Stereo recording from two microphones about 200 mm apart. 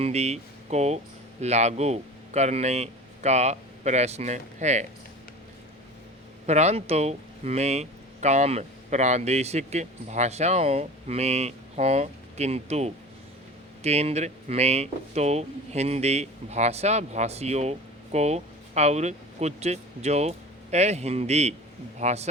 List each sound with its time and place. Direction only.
0.0 s speech: 30° right (ahead or behind)
6.4 s speech: 35° right (ahead or behind)